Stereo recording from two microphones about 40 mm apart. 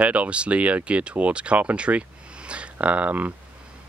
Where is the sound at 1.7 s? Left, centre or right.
Right.